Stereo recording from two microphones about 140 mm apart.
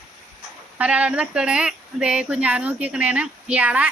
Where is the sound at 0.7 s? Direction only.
10° right (ahead or behind).